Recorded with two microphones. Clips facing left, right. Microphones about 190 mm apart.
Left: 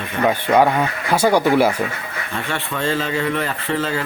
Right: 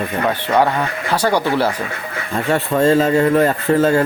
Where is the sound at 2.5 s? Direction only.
40° right (ahead or behind).